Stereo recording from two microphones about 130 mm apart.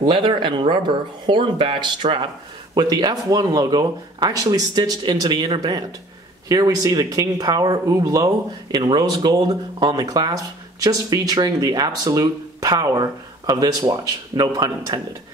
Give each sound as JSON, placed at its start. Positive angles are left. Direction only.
{"t": 0.0, "sound": "speech", "side_deg": -40}
{"t": 2.7, "sound": "speech", "side_deg": -30}